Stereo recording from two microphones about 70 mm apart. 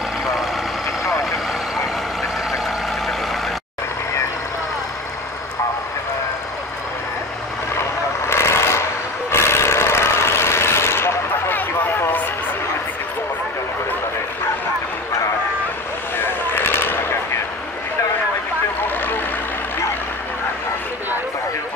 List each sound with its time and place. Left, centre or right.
8.3 s vehicle: left
16.2 s vehicle: left
18.9 s a sound: left